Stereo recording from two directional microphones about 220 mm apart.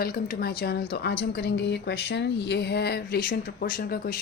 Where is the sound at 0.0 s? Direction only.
40° left (ahead or behind).